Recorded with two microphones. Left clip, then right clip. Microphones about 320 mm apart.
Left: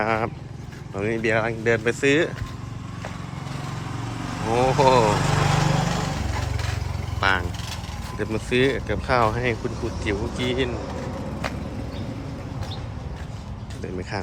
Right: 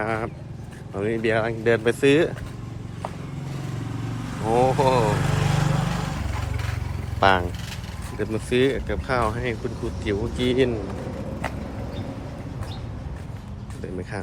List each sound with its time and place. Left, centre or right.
0.0 s speech: centre
4.5 s speech: centre
5.3 s vehicle: centre
7.2 s speech: centre